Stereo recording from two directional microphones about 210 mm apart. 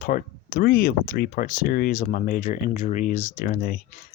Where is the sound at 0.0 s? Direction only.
45° left (ahead or behind).